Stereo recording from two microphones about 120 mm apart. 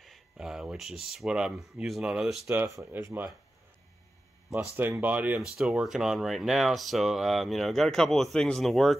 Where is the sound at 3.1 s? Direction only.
15° right (ahead or behind).